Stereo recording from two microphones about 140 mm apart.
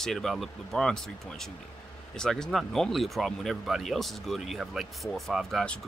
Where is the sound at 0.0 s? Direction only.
Centre (ahead or behind).